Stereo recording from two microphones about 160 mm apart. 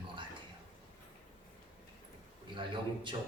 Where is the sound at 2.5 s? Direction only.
30° right (ahead or behind).